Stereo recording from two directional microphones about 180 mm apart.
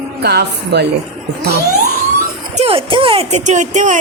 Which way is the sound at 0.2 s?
65° right (ahead or behind).